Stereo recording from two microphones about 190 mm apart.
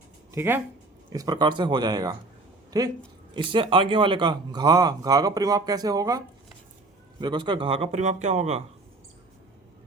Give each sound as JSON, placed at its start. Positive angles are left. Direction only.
{"t": 0.3, "sound": "a man's voice", "side_deg": -10}
{"t": 2.6, "sound": "a sound", "side_deg": -20}
{"t": 3.3, "sound": "a man's voice", "side_deg": -25}